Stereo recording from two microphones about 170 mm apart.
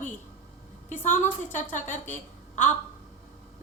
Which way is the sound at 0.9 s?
50° left (ahead or behind).